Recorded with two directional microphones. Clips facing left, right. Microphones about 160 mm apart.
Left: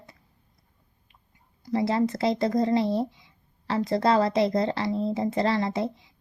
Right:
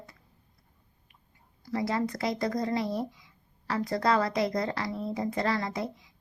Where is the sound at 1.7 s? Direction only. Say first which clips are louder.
Left 5 dB; 25° left (ahead or behind).